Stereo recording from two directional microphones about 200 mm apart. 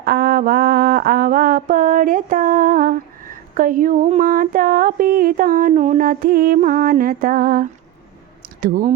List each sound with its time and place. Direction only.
0.0 s mantra: 50° right (ahead or behind)
8.6 s speech: 45° right (ahead or behind)